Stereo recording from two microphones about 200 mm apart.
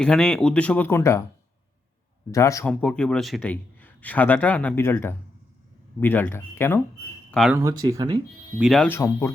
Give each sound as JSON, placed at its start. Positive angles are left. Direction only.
{"t": 0.0, "sound": "speech", "side_deg": 5}
{"t": 2.3, "sound": "a man's voice", "side_deg": 15}
{"t": 7.3, "sound": "a sound", "side_deg": 0}
{"t": 7.5, "sound": "speech", "side_deg": -20}
{"t": 8.5, "sound": "speech", "side_deg": 0}
{"t": 8.9, "sound": "a man's voice", "side_deg": 10}